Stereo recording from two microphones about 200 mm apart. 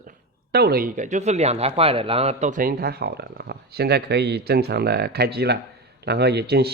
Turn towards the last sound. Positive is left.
turn(degrees=-55)  # may be behind; listen again after turning